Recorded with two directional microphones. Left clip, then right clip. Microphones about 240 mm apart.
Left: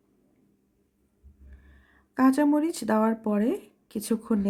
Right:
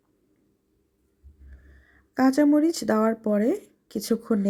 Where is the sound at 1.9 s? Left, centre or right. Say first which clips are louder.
Right 1 dB; centre.